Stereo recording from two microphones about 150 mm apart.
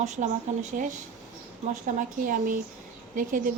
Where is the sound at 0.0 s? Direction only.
50° right (ahead or behind).